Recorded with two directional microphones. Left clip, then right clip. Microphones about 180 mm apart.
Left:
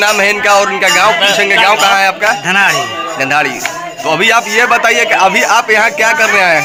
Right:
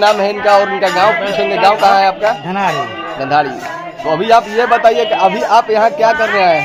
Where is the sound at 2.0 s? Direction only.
30° left (ahead or behind).